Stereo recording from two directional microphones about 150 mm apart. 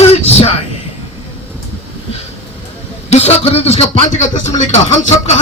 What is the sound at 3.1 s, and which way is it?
A man's voice, 45° left (ahead or behind).